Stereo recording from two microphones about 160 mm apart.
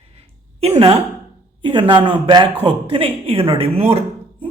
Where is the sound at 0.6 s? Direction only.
35° right (ahead or behind).